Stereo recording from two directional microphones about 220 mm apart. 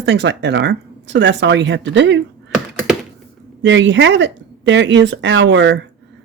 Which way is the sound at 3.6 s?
55° right (ahead or behind).